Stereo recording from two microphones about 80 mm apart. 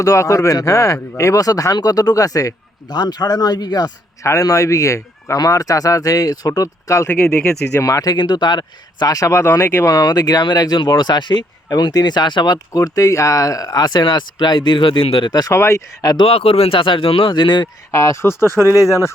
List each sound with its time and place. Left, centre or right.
0.0 s speech: left
4.2 s speech: left
8.1 s speech: left
12.7 s speech: left
15.5 s speech: left
16.7 s speech: left
17.9 s speech: left